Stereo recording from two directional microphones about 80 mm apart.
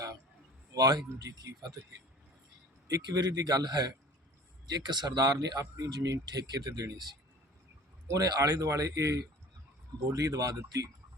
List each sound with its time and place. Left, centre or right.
0.7 s a man's voice: right
2.8 s speech: right
8.0 s speech: right